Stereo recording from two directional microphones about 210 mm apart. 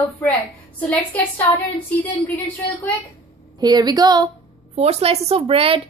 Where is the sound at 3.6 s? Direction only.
20° right (ahead or behind).